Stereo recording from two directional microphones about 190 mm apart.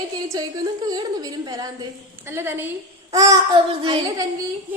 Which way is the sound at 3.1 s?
15° right (ahead or behind).